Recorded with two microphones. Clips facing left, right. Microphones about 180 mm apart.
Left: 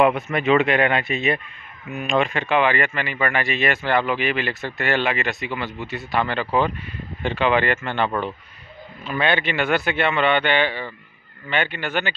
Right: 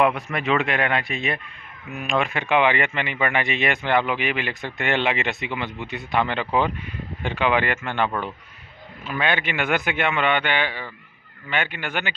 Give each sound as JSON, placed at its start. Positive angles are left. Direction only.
{"t": 0.0, "sound": "speech", "side_deg": 0}